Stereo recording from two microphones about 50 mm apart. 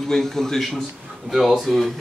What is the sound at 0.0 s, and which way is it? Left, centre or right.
Speech, centre.